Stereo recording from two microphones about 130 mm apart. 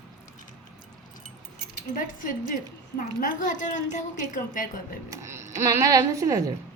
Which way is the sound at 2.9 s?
80° left.